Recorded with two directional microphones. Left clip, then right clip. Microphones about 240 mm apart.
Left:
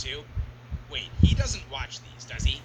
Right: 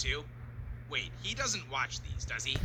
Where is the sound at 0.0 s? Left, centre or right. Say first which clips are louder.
Left 1 dB; centre.